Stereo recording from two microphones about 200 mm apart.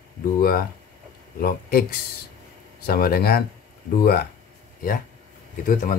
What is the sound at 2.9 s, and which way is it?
Speech, 50° left (ahead or behind).